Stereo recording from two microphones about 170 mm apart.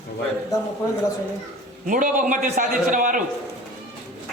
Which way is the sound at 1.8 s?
55° right (ahead or behind).